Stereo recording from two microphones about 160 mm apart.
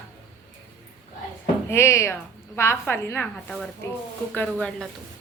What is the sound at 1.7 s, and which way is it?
A woman's voice, 15° left (ahead or behind).